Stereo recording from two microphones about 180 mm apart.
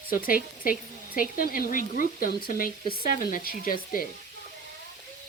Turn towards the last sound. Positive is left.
turn(degrees=50)  # may be behind; listen again after turning